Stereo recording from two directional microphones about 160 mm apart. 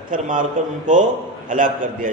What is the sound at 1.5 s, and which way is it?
Speech, 55° right (ahead or behind).